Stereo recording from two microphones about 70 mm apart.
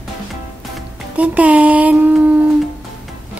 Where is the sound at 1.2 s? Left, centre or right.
Centre.